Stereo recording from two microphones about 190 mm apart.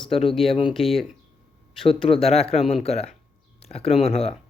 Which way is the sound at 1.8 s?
30° left (ahead or behind).